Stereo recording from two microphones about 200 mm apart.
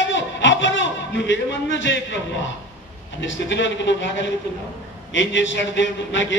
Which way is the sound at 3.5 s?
65° left (ahead or behind).